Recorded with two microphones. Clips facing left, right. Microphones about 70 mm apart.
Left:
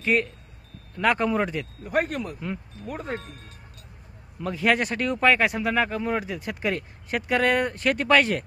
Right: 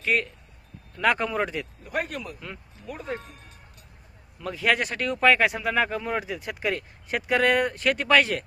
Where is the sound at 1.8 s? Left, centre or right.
Left.